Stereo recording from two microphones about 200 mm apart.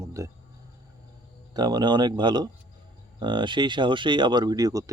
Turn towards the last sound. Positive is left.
turn(degrees=-20)  # may be behind; listen again after turning